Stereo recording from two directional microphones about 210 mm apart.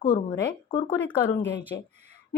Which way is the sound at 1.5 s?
55° left (ahead or behind).